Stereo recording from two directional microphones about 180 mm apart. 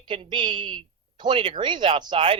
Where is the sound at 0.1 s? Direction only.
30° right (ahead or behind).